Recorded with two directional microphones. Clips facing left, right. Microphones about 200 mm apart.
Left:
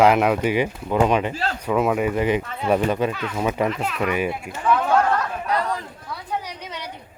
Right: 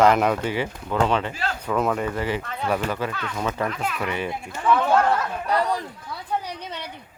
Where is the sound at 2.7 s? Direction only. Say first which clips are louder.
Left 5 dB; 20° left (ahead or behind).